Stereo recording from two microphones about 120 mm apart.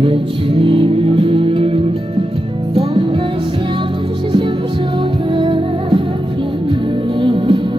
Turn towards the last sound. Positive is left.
turn(degrees=-45)  # may be behind; listen again after turning